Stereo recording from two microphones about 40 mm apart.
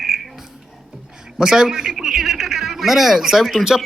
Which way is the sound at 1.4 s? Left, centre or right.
Centre.